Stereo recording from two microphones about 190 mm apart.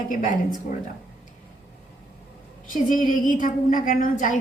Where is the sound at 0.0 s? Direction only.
45° left (ahead or behind).